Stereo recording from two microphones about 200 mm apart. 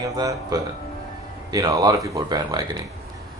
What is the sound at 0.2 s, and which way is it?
Speech, 20° right (ahead or behind).